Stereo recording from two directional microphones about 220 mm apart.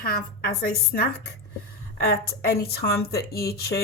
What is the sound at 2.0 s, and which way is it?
Speech, 45° left (ahead or behind).